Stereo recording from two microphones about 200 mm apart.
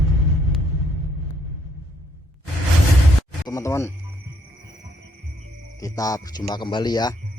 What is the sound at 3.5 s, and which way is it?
Speech, 15° left (ahead or behind).